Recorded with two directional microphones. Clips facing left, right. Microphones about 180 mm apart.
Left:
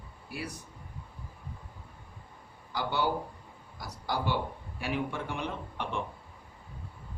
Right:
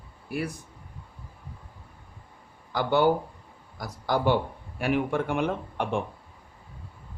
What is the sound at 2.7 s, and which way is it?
Speech, 55° right (ahead or behind).